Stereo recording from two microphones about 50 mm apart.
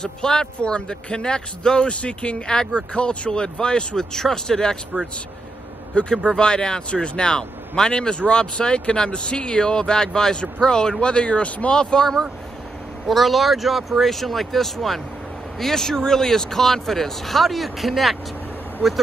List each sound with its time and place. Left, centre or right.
0.0 s speech: centre
6.2 s speech: centre
13.0 s speech: centre